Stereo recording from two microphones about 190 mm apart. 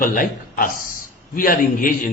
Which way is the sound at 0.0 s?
45° left (ahead or behind).